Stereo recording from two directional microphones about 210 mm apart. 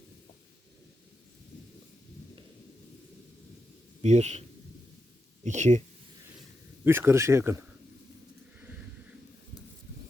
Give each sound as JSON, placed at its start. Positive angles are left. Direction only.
{"t": 4.0, "sound": "a man's voice", "side_deg": -30}
{"t": 6.8, "sound": "speech", "side_deg": -10}